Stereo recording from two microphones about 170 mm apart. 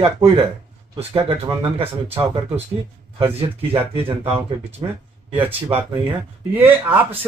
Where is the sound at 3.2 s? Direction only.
35° right (ahead or behind).